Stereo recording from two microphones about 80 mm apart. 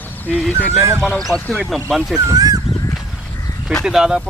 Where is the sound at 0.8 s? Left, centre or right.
Right.